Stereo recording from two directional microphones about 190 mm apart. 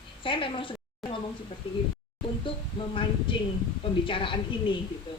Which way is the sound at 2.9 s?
25° left (ahead or behind).